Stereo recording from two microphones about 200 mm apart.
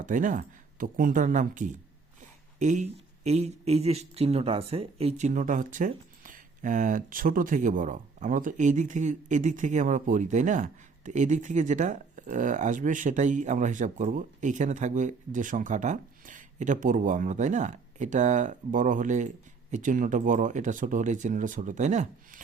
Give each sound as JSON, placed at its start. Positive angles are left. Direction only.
{"t": 0.0, "sound": "speech", "side_deg": -40}